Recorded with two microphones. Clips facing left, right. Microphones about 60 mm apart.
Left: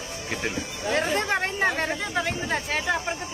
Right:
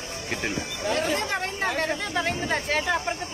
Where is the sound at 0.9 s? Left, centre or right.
Left.